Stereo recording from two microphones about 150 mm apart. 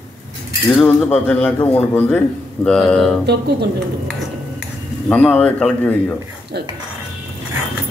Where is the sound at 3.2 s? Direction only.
90° right.